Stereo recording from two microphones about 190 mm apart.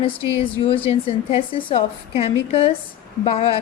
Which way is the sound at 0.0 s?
30° left (ahead or behind).